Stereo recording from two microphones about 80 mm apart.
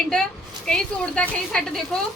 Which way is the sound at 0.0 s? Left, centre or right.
Centre.